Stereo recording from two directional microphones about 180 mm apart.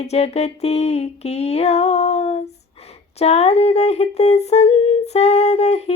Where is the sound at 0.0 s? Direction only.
35° left (ahead or behind).